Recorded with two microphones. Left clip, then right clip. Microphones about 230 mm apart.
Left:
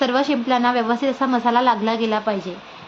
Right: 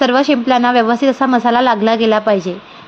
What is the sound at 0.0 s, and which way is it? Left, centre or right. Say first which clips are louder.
Speech: right 7 dB; right.